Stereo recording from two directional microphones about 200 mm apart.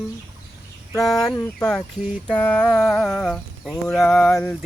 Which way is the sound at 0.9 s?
Centre (ahead or behind).